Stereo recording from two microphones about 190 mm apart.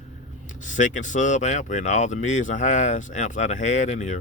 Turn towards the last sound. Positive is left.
turn(degrees=40)  # may be behind; listen again after turning